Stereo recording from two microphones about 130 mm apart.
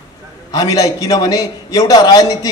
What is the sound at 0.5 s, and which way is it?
A man's voice, 25° left (ahead or behind).